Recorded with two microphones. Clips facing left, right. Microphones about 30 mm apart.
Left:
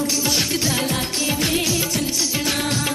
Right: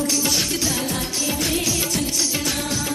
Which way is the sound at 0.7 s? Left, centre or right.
Left.